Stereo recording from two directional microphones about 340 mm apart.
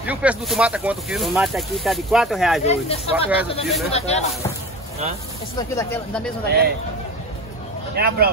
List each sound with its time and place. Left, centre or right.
0.0 s speech: centre
2.6 s speech: centre
3.6 s speech: centre
3.9 s speech: centre
5.6 s speech: centre
6.4 s a man's voice: right
7.9 s speech: right